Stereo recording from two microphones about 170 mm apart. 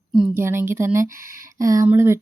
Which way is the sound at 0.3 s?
15° right (ahead or behind).